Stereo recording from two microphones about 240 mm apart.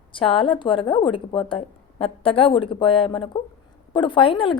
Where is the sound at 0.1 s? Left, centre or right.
Left.